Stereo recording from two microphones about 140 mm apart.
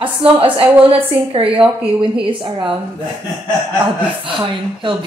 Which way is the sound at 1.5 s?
10° right (ahead or behind).